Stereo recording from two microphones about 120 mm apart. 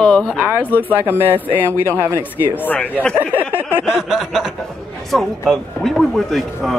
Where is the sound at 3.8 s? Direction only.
5° right (ahead or behind).